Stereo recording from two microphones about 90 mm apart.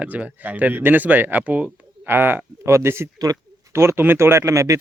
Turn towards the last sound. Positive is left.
turn(degrees=-35)  # may be behind; listen again after turning